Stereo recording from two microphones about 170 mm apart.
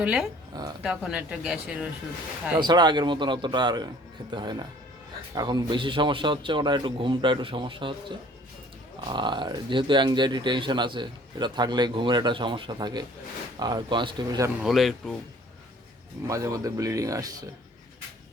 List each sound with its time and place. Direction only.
0.0 s speech: 5° right (ahead or behind)
2.6 s speech: 25° right (ahead or behind)
9.0 s speech: 25° right (ahead or behind)
14.6 s speech: centre (ahead or behind)
16.2 s speech: 20° right (ahead or behind)